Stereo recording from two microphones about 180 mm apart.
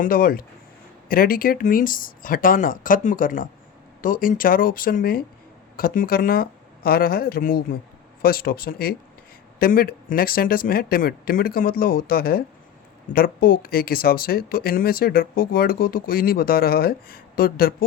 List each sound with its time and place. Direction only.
0.0 s speech: 55° left (ahead or behind)